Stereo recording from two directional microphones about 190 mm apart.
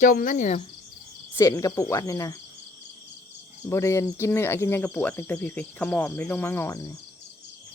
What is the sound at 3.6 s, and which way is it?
Speech, 15° left (ahead or behind).